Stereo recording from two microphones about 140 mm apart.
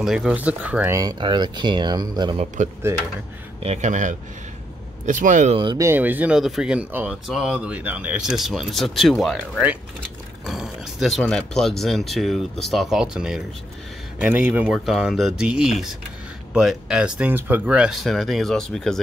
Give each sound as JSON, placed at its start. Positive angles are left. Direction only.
{"t": 0.0, "sound": "speech", "side_deg": -5}
{"t": 0.9, "sound": "speech", "side_deg": -30}
{"t": 2.4, "sound": "speech", "side_deg": -60}
{"t": 5.8, "sound": "speech", "side_deg": -15}